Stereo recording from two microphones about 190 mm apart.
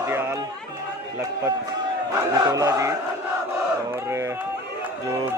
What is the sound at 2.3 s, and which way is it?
Speech, 20° right (ahead or behind).